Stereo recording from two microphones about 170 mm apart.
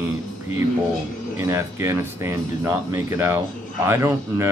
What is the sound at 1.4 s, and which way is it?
Speech, 15° right (ahead or behind).